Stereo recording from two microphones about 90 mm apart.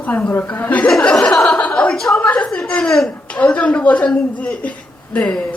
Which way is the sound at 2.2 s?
15° left (ahead or behind).